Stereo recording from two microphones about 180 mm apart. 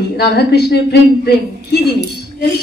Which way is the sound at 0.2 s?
65° left (ahead or behind).